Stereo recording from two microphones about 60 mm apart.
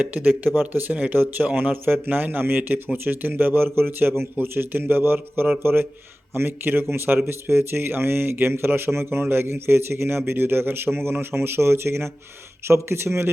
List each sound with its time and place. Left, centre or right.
0.0 s speech: right